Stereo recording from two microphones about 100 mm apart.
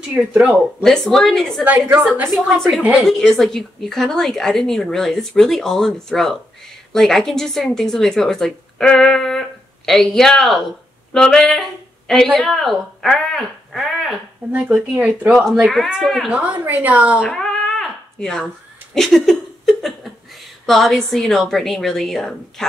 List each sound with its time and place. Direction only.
0.3 s a woman's voice: 15° right (ahead or behind)
0.8 s a woman's voice: 5° left (ahead or behind)
1.6 s a woman's voice: 15° right (ahead or behind)
3.1 s a woman's voice: 5° left (ahead or behind)
11.1 s a sound: 5° left (ahead or behind)
12.4 s speech: centre (ahead or behind)
14.5 s a woman's voice: 15° right (ahead or behind)
16.3 s a woman's voice: 15° right (ahead or behind)
17.3 s cat: 5° left (ahead or behind)
18.9 s laughter: 5° left (ahead or behind)
20.6 s a woman's voice: centre (ahead or behind)